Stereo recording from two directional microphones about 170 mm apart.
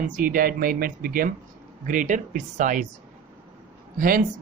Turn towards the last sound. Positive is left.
turn(degrees=-50)  # may be behind; listen again after turning